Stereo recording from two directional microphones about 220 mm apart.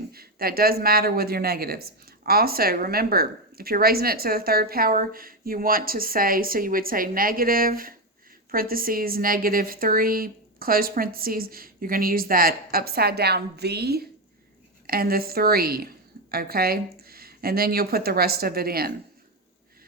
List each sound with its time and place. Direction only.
0.1 s speech: 45° right (ahead or behind)